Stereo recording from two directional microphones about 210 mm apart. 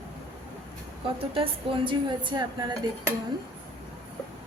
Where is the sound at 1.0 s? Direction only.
25° right (ahead or behind).